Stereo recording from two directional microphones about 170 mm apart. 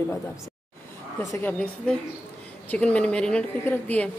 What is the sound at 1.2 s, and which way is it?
Speech, 20° left (ahead or behind).